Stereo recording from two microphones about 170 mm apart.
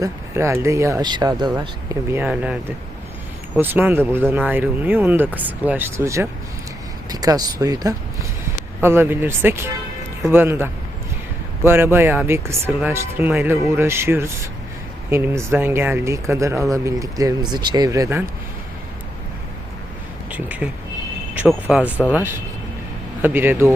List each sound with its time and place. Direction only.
0.0 s speech: 15° right (ahead or behind)
2.0 s speech: 10° right (ahead or behind)
20.3 s speech: 10° right (ahead or behind)